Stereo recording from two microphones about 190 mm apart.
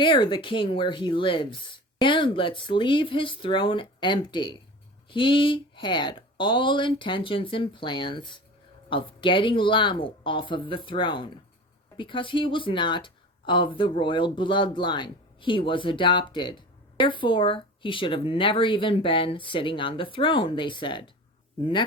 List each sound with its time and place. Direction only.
0.0 s speech: 25° left (ahead or behind)